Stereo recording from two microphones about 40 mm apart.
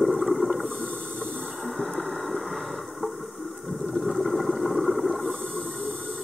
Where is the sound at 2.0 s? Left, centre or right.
Centre.